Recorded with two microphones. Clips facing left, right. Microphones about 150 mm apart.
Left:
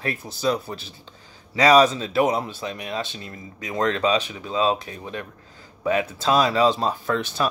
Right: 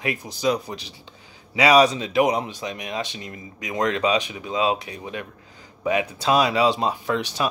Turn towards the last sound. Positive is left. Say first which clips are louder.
# even
turn(degrees=-15)  # may be behind; listen again after turning